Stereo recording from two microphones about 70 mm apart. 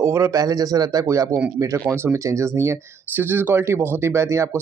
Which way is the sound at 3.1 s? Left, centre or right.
Right.